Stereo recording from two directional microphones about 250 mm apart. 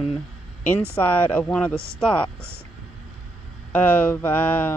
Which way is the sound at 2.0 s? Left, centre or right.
Centre.